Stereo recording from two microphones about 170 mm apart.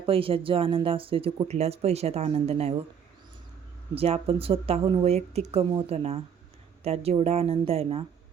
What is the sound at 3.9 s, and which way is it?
Speech, 35° right (ahead or behind).